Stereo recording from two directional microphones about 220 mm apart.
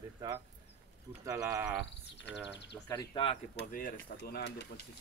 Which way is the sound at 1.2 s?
15° right (ahead or behind).